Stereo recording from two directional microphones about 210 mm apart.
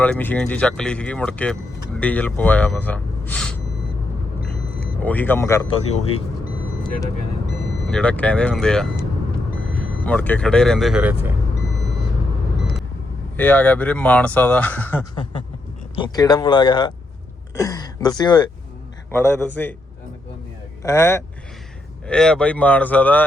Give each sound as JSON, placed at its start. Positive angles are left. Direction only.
{"t": 0.0, "sound": "speech", "side_deg": 10}
{"t": 4.9, "sound": "speech", "side_deg": 10}
{"t": 5.6, "sound": "speech", "side_deg": 30}
{"t": 7.9, "sound": "speech", "side_deg": 5}
{"t": 10.1, "sound": "speech", "side_deg": 5}
{"t": 13.3, "sound": "speech", "side_deg": 10}
{"t": 15.1, "sound": "speech", "side_deg": 25}
{"t": 20.8, "sound": "speech", "side_deg": 10}